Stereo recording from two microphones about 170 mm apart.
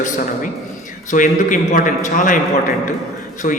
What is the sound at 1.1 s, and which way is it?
A man's voice, 50° left (ahead or behind).